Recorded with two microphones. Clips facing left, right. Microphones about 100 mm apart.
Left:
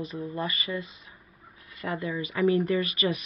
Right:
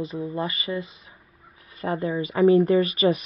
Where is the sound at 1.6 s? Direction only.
30° right (ahead or behind).